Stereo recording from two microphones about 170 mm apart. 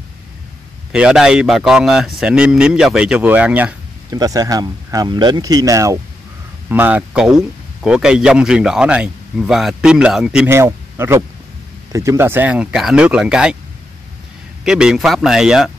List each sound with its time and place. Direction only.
0.9 s speech: 5° right (ahead or behind)
4.1 s speech: 20° right (ahead or behind); by 13.6 s 5° right (ahead or behind)
14.6 s speech: 5° right (ahead or behind)